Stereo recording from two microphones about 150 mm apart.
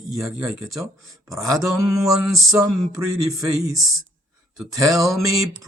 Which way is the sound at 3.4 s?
20° right (ahead or behind).